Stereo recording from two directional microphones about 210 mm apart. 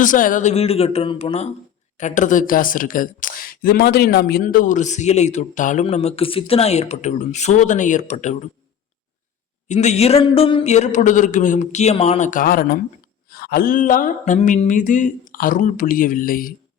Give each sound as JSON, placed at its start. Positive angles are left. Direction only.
{"t": 0.0, "sound": "speech", "side_deg": 40}
{"t": 9.6, "sound": "speech", "side_deg": 35}